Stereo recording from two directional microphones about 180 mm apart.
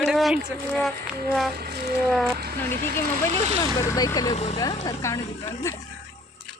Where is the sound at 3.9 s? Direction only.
20° left (ahead or behind).